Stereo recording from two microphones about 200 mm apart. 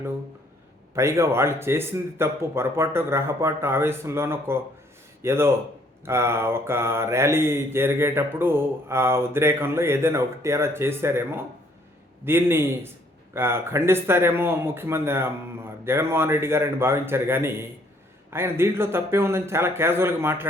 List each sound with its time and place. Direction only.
0.9 s mantra: 15° right (ahead or behind)